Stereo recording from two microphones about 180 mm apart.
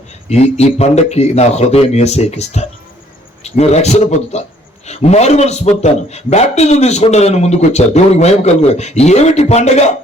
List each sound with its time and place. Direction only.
0.3 s a man's voice: 35° left (ahead or behind)